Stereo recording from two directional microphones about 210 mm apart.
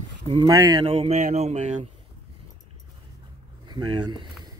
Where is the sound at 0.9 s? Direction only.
30° right (ahead or behind).